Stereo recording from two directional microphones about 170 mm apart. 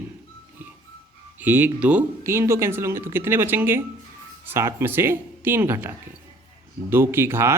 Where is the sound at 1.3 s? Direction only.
10° right (ahead or behind).